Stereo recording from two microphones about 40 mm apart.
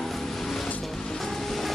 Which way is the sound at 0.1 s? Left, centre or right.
Centre.